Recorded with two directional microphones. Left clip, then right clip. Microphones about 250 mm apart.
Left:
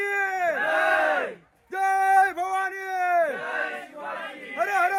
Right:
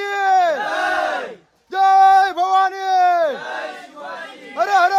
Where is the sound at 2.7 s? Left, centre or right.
Centre.